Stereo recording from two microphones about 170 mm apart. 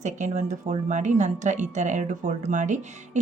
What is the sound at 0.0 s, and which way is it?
A woman's voice, 45° right (ahead or behind).